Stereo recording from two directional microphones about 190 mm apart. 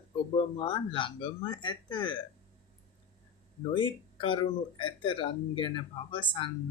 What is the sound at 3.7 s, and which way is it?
Speech, 25° left (ahead or behind).